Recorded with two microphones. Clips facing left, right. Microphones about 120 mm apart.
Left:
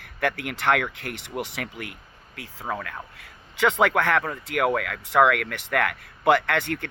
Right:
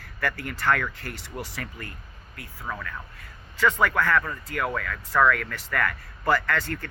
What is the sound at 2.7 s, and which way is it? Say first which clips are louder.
Speech: left 4 dB; 45° left (ahead or behind).